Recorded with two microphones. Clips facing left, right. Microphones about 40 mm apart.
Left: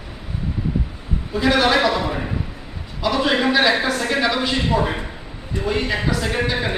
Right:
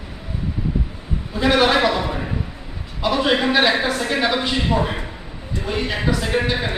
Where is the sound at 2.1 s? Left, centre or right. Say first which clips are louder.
Left 1 dB; centre.